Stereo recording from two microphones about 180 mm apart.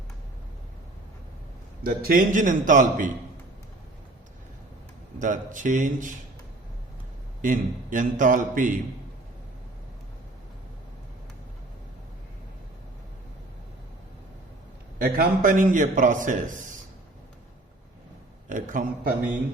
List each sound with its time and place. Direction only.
1.8 s a man's voice: 55° right (ahead or behind)
5.2 s a man's voice: 45° right (ahead or behind)
7.4 s a man's voice: 45° right (ahead or behind)
14.9 s a man's voice: 55° right (ahead or behind)
18.4 s a man's voice: 45° right (ahead or behind)